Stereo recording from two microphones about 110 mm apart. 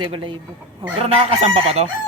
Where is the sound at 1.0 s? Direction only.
70° right (ahead or behind).